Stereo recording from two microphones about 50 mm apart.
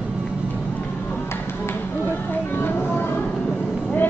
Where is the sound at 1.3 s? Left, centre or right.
Left.